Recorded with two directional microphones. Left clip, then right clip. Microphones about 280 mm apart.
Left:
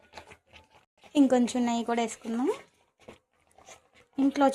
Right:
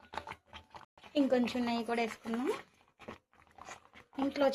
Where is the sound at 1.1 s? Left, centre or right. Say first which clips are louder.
Left 7 dB; left.